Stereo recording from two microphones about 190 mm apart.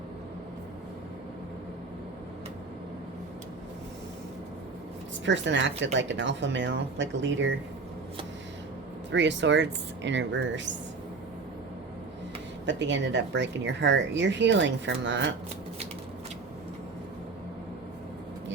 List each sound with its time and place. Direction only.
5.2 s speech: 70° right (ahead or behind)
9.1 s speech: 70° right (ahead or behind)
12.6 s speech: 70° right (ahead or behind)